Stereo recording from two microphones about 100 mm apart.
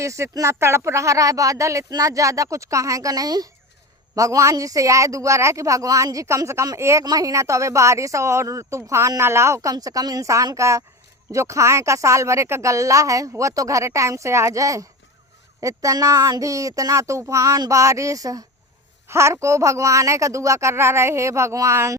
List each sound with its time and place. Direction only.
0.0 s a woman's voice: 30° right (ahead or behind)